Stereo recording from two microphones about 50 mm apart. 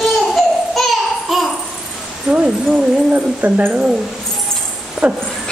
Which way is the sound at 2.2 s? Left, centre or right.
Centre.